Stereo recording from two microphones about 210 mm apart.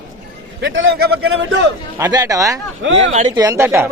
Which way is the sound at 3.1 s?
35° right (ahead or behind).